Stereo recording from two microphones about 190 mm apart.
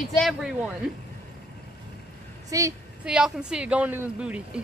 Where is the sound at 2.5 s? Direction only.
15° right (ahead or behind).